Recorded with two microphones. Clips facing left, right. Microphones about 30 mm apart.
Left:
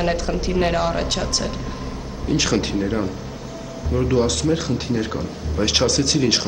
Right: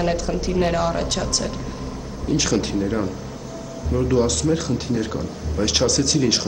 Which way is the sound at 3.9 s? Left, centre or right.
Centre.